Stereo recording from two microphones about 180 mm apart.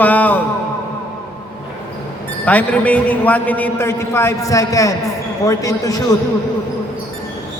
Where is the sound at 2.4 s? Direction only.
10° left (ahead or behind).